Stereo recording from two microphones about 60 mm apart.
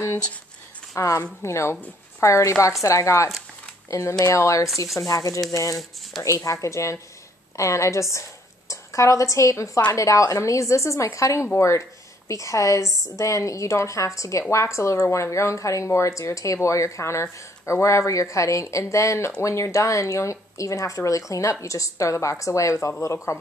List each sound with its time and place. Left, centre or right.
0.9 s speech: left
1.4 s speech: left
4.9 s speech: left
5.5 s a woman's voice: left